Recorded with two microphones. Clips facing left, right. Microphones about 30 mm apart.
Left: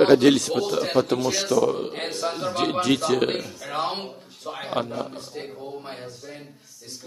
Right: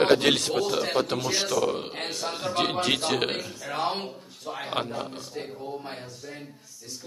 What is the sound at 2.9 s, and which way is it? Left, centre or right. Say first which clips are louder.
Speech: left 4 dB; right.